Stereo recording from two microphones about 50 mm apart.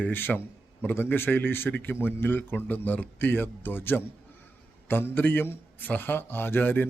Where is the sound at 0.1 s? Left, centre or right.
Left.